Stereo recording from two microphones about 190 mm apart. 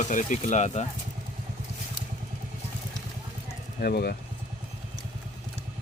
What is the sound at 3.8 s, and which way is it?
Speech, 55° left (ahead or behind).